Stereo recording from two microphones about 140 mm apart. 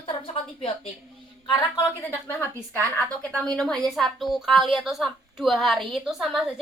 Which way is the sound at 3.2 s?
5° left (ahead or behind).